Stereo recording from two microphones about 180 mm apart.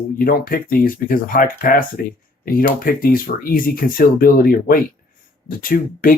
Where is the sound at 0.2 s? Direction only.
55° left (ahead or behind).